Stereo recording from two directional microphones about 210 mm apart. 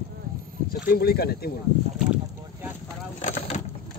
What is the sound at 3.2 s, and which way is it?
Vehicle, 35° left (ahead or behind).